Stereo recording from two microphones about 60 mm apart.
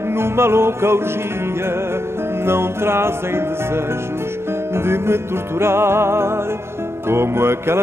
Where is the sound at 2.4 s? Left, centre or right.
Right.